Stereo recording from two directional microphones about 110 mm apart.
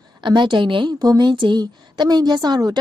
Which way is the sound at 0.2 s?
45° right (ahead or behind).